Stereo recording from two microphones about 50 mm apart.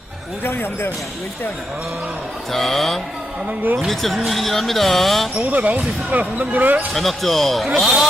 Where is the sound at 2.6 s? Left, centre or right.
Centre.